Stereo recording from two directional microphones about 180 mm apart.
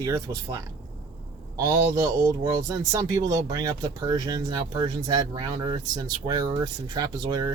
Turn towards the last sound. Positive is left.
turn(degrees=-25)  # may be behind; listen again after turning